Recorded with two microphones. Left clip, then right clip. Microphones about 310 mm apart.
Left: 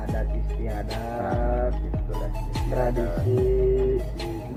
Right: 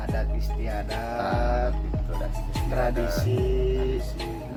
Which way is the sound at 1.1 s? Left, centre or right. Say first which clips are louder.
Right 1 dB; right.